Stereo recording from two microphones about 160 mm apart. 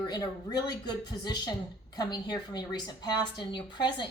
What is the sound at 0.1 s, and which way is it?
Speech, 25° left (ahead or behind).